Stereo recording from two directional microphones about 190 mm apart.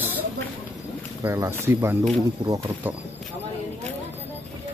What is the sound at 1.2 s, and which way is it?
Speech, 15° right (ahead or behind).